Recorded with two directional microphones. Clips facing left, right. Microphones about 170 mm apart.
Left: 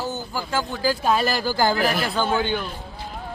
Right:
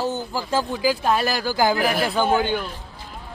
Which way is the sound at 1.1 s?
Centre (ahead or behind).